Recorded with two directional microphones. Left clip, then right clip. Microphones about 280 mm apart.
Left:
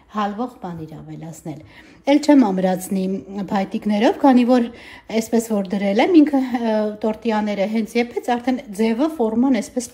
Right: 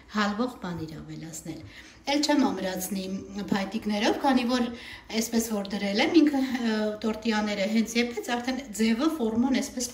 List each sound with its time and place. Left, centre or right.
0.1 s a woman's voice: centre
2.0 s a woman's voice: left